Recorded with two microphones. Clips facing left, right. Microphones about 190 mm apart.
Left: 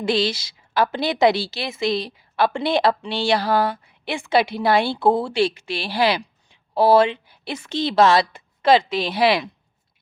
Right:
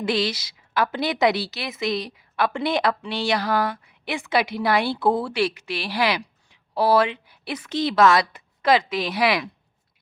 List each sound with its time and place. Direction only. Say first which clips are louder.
0.0 s a woman's voice: left 2 dB; 30° left (ahead or behind)